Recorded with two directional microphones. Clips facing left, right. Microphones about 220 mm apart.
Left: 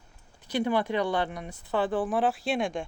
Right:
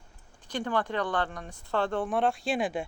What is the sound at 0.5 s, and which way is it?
Speech, 10° left (ahead or behind).